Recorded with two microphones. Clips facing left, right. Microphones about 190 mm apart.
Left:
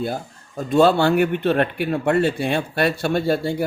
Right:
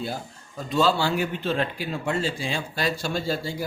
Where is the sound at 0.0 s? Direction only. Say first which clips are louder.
Left 6 dB; 55° left (ahead or behind).